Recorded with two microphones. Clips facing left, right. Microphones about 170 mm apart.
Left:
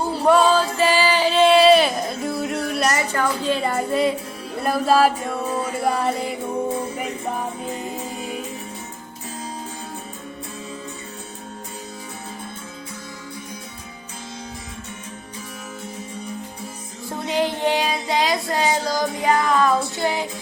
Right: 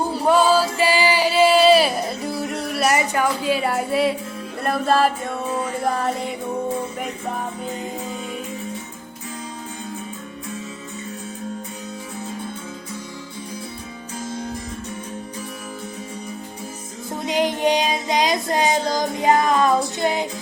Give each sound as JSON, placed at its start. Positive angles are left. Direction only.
{"t": 0.0, "sound": "music", "side_deg": -15}
{"t": 0.3, "sound": "a sound", "side_deg": 0}
{"t": 2.9, "sound": "a woman's voice", "side_deg": -15}
{"t": 4.6, "sound": "music", "side_deg": 5}
{"t": 17.1, "sound": "child singing", "side_deg": -15}